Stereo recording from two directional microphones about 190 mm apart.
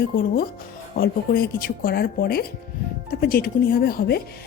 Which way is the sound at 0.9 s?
50° left (ahead or behind).